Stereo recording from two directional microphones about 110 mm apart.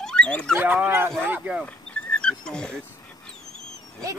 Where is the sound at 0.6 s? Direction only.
20° right (ahead or behind).